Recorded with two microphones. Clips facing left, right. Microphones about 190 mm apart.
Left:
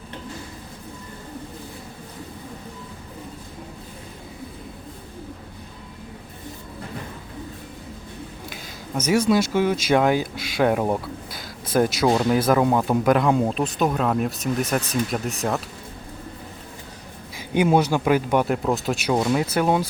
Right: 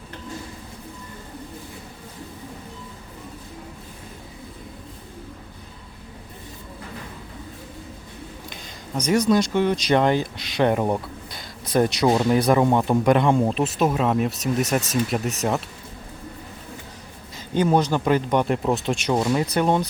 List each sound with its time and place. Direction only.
9.0 s speech: 5° left (ahead or behind)
17.3 s speech: 10° left (ahead or behind)